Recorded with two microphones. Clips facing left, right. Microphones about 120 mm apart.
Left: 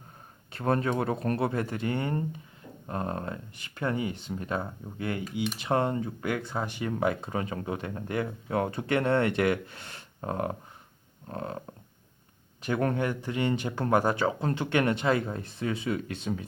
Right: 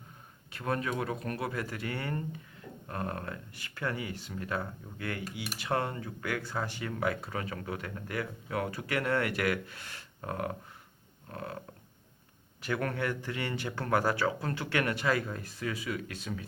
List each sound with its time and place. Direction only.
0.5 s speech: 35° left (ahead or behind)
12.6 s speech: 20° left (ahead or behind)